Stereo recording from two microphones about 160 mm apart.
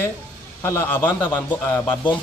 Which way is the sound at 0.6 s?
15° left (ahead or behind).